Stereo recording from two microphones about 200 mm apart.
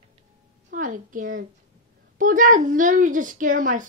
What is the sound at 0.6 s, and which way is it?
A woman's voice, 40° right (ahead or behind).